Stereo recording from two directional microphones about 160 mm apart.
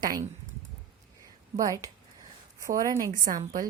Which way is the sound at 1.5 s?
20° right (ahead or behind).